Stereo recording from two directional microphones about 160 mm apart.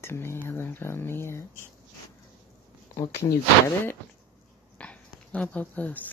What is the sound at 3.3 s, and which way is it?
Speech, 15° left (ahead or behind).